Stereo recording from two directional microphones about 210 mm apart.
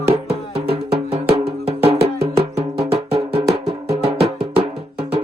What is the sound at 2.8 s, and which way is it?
Music, 30° right (ahead or behind).